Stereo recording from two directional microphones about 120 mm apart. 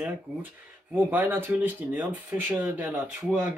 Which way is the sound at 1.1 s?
15° right (ahead or behind).